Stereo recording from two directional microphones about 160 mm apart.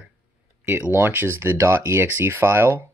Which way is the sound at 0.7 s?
15° right (ahead or behind).